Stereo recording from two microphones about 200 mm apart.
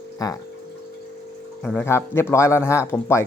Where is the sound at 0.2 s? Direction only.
20° left (ahead or behind).